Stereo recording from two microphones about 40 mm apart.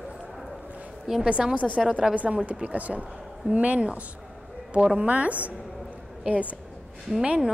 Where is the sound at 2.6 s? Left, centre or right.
Right.